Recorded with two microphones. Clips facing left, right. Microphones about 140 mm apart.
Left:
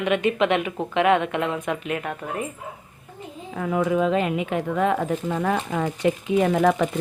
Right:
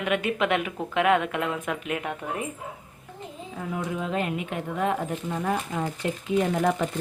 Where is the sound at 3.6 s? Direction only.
90° left.